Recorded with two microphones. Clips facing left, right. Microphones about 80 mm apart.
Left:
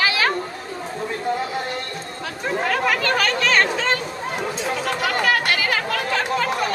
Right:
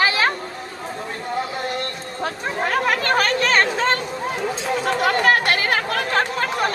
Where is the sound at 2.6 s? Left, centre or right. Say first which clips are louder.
Right 2 dB; right.